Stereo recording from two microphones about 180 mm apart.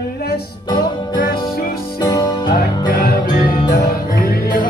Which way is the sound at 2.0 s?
20° left (ahead or behind).